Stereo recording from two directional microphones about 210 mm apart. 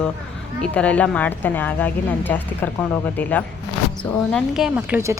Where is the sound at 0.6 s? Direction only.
5° left (ahead or behind).